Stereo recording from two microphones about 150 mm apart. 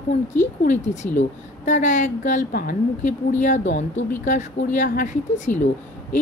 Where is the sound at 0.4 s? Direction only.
55° left (ahead or behind).